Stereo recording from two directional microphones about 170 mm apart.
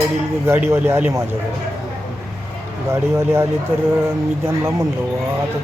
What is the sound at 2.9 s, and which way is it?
Speech, 15° right (ahead or behind).